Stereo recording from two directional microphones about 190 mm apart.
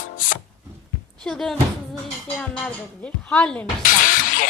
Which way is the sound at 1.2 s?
Centre (ahead or behind).